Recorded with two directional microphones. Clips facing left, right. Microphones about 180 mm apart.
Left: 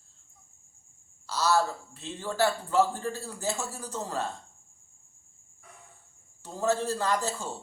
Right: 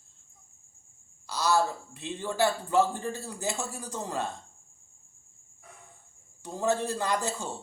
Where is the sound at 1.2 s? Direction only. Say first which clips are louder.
Even; 15° right (ahead or behind).